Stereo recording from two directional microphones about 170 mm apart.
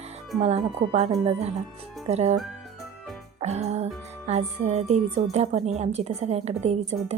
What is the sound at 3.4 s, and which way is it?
A woman's voice, 40° right (ahead or behind).